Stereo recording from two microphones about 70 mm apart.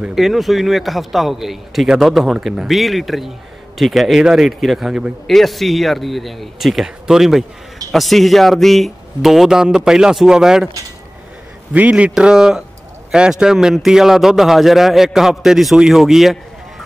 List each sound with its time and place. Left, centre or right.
0.1 s a man's voice: centre
5.2 s a man's voice: centre
11.7 s a man's voice: centre
12.1 s a man's voice: centre